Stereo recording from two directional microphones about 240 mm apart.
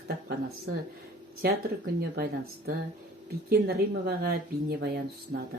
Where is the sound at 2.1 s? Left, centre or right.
Right.